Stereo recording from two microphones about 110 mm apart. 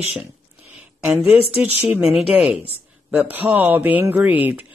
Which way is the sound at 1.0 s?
10° right (ahead or behind).